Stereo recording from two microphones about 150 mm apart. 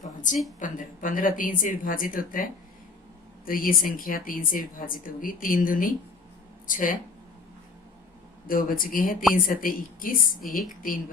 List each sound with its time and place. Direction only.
0.6 s speech: 60° left (ahead or behind)
8.4 s speech: 70° left (ahead or behind)
10.4 s speech: centre (ahead or behind)